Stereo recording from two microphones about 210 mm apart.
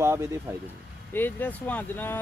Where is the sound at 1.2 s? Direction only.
10° left (ahead or behind).